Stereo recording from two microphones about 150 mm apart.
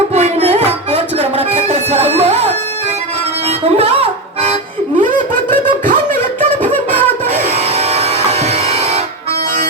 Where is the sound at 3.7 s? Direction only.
40° right (ahead or behind).